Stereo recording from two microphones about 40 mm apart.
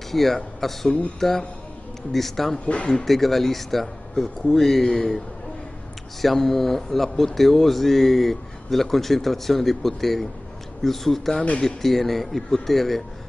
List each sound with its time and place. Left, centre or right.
0.1 s speech: centre
2.5 s speech: left
3.1 s speech: centre
4.8 s speech: centre
6.2 s speech: centre